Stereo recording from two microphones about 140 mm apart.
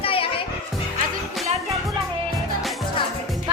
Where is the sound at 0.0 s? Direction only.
40° left (ahead or behind).